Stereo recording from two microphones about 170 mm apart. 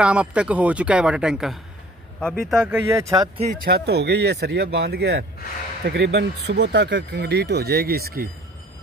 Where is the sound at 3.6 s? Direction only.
70° right (ahead or behind).